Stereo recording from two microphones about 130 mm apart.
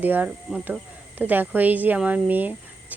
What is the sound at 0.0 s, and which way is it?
A woman's voice, 15° right (ahead or behind).